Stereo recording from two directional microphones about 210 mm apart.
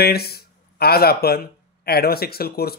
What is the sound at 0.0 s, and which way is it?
Speech, 50° left (ahead or behind).